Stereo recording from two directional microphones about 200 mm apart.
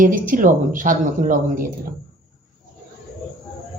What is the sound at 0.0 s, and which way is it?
Speech, 45° right (ahead or behind).